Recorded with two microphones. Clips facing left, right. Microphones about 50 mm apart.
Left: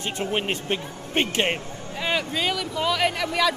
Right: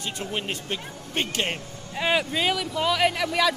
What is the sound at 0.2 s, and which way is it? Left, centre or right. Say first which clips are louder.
Speech: left 6 dB; left.